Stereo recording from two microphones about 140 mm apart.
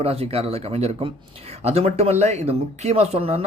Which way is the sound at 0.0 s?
45° right (ahead or behind).